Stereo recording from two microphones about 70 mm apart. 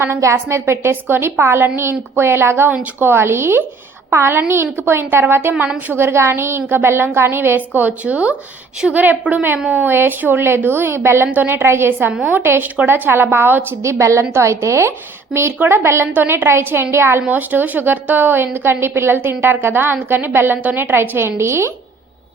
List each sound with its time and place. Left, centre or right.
0.0 s a woman's voice: right
11.3 s a woman's voice: right
13.8 s a woman's voice: right
17.2 s a woman's voice: right